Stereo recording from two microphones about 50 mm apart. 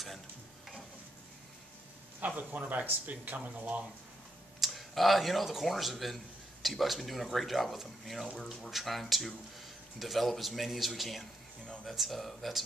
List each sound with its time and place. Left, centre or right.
2.1 s speech: right
4.6 s speech: centre
11.6 s speech: centre
11.9 s speech: centre